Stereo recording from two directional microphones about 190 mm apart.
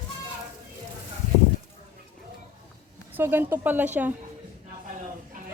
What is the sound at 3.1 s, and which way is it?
Speech, 10° right (ahead or behind).